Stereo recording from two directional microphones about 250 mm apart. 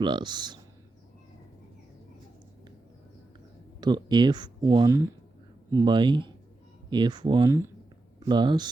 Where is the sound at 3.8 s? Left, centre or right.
Centre.